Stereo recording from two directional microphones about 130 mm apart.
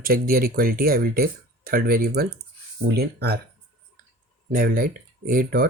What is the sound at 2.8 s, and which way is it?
Speech, 50° right (ahead or behind).